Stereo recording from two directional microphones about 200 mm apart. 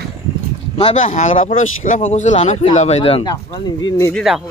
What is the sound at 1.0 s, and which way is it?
Speech, 40° left (ahead or behind).